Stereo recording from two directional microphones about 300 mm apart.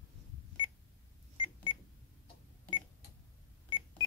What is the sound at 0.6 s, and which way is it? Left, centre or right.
Beep, centre.